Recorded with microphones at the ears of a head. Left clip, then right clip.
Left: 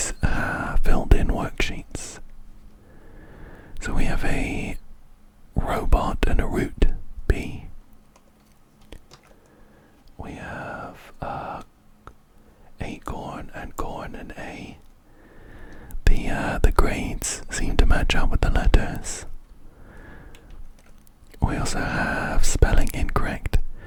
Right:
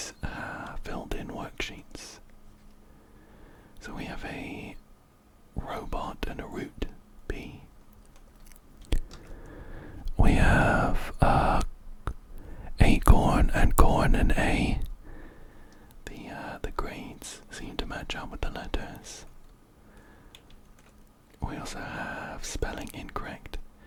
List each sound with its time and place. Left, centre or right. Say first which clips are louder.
0.0 s whispering: left 10 dB; left
9.4 s a sound: right 7 dB; right
15.4 s whispering: left 9 dB; left
19.8 s tick-tock: left 10 dB; left
21.3 s whispering: left 10 dB; left